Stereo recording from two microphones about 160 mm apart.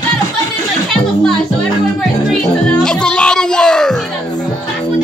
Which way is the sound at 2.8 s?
5° left (ahead or behind).